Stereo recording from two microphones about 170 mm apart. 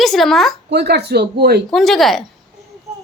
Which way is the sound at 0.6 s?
80° right.